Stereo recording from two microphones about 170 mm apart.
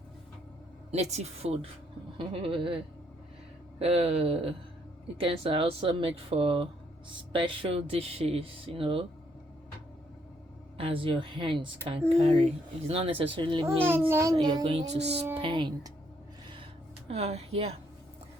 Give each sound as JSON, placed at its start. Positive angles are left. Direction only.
{"t": 0.9, "sound": "speech", "side_deg": -40}
{"t": 3.8, "sound": "speech", "side_deg": -35}
{"t": 10.8, "sound": "speech", "side_deg": -35}
{"t": 13.7, "sound": "a child's voice", "side_deg": -15}
{"t": 17.1, "sound": "speech", "side_deg": -40}